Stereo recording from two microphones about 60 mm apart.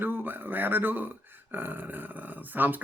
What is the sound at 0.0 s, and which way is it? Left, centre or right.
Speech, right.